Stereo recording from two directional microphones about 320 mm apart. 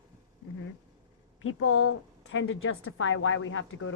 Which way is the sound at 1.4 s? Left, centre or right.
Left.